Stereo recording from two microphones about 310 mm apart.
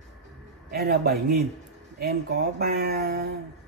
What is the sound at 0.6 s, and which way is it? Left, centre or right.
Speech, right.